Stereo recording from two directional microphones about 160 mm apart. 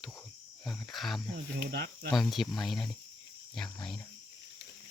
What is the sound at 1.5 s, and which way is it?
Speech, 85° right.